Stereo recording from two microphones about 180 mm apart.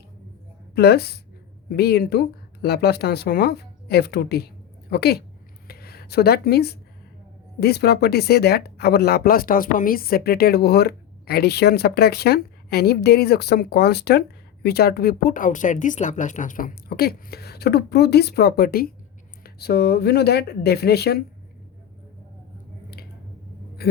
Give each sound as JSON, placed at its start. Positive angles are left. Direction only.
{"t": 0.8, "sound": "speech", "side_deg": 65}
{"t": 5.6, "sound": "a sound", "side_deg": 60}
{"t": 7.6, "sound": "speech", "side_deg": 65}